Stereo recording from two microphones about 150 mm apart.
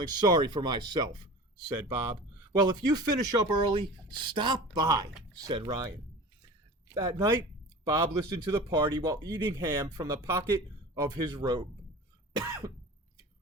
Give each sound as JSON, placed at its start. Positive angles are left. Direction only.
{"t": 0.0, "sound": "speech", "side_deg": -30}
{"t": 12.3, "sound": "cough", "side_deg": -25}